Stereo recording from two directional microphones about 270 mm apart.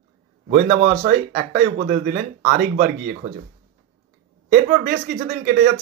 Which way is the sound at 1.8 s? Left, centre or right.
Right.